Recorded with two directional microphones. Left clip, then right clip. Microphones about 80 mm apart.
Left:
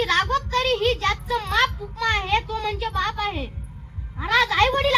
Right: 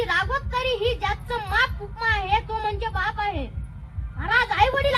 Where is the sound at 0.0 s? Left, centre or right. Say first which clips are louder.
Left 3 dB; left.